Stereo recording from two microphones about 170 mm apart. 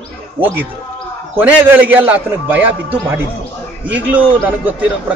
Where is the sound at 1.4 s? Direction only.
10° right (ahead or behind).